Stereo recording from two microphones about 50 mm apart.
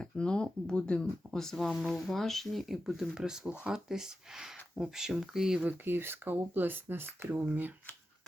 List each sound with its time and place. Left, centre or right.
0.0 s speech: centre
1.3 s speech: centre
3.4 s speech: right
3.7 s speech: centre
5.8 s speech: right
7.4 s speech: right